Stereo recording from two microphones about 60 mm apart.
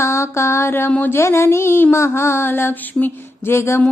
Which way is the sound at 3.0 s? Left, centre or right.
Left.